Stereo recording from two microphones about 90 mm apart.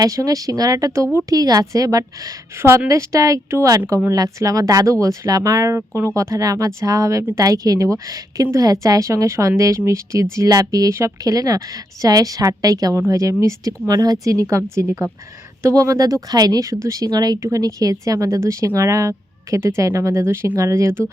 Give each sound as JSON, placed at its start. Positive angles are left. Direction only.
{"t": 0.0, "sound": "speech", "side_deg": -40}
{"t": 2.6, "sound": "speech", "side_deg": -30}